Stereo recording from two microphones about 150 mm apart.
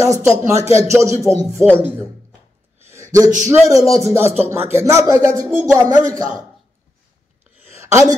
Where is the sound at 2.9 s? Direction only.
20° right (ahead or behind).